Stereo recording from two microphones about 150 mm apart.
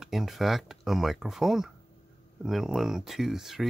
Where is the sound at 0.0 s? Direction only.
Centre (ahead or behind).